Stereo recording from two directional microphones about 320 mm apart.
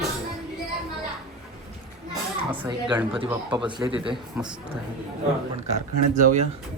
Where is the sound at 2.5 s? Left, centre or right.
Centre.